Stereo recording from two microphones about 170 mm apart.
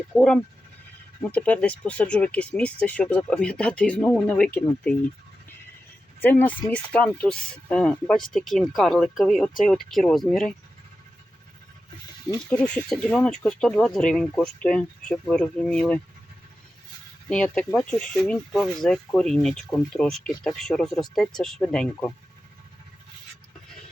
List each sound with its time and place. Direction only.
0.1 s speech: 5° left (ahead or behind)
6.1 s speech: 10° left (ahead or behind)
12.5 s speech: 5° left (ahead or behind)
17.2 s speech: 5° left (ahead or behind)